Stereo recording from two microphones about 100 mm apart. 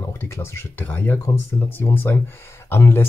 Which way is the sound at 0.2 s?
25° left (ahead or behind).